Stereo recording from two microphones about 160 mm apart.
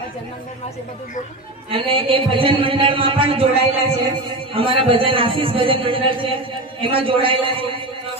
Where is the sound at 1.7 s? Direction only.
35° right (ahead or behind).